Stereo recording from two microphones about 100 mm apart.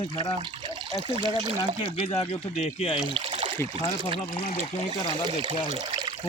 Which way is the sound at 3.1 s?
70° right (ahead or behind).